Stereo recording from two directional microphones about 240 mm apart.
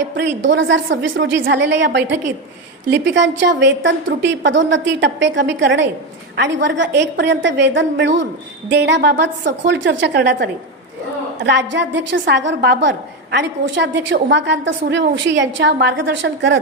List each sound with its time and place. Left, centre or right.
0.0 s a woman's voice: right